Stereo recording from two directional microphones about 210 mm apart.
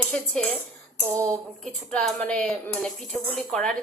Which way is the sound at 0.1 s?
5° left (ahead or behind).